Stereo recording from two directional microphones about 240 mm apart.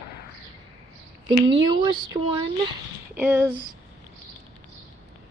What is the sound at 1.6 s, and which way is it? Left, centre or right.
Speech, centre.